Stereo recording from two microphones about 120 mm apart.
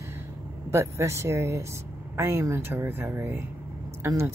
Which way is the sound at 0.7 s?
25° right (ahead or behind).